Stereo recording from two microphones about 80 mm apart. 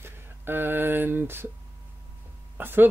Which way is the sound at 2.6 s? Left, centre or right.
Right.